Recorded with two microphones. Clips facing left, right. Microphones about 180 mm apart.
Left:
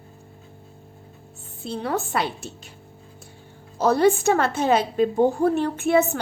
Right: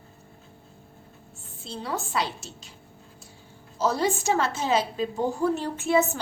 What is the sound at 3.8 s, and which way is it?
A woman's voice, 60° left (ahead or behind).